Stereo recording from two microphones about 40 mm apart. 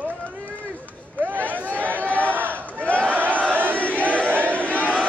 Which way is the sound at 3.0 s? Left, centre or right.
Right.